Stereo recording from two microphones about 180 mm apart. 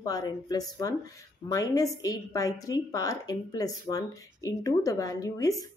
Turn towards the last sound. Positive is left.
turn(degrees=20)  # may be behind; listen again after turning